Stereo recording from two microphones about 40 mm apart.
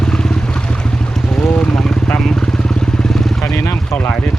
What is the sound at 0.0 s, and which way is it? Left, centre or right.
Vehicle, centre.